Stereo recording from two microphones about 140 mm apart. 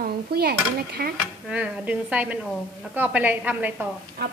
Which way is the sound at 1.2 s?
10° right (ahead or behind).